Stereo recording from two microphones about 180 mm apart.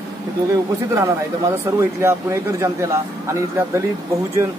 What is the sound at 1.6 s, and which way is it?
Speech, 15° right (ahead or behind).